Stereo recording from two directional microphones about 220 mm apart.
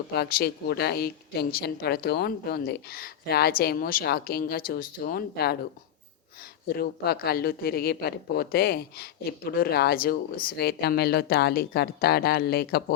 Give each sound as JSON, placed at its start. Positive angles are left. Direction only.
{"t": 0.1, "sound": "speech", "side_deg": 45}
{"t": 6.7, "sound": "speech", "side_deg": 45}